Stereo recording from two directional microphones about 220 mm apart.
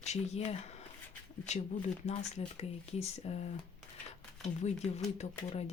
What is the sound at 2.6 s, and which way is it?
Speech, 30° left (ahead or behind).